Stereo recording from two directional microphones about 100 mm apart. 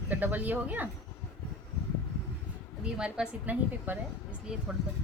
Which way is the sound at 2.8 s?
5° right (ahead or behind).